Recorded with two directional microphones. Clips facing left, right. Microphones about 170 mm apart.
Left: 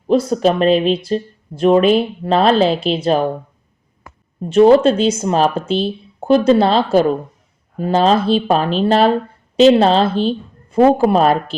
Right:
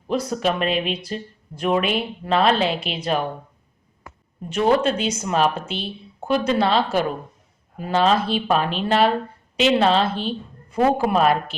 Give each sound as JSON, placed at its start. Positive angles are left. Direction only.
{"t": 0.1, "sound": "speech", "side_deg": 30}
{"t": 4.4, "sound": "speech", "side_deg": 30}